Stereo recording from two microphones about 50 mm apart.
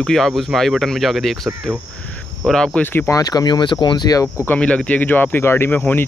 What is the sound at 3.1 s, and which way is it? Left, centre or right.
Speech, left.